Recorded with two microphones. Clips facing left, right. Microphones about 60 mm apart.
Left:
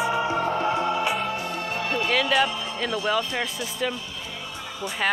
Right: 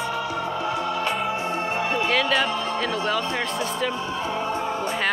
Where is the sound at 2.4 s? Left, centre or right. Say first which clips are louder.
Right 2 dB; right.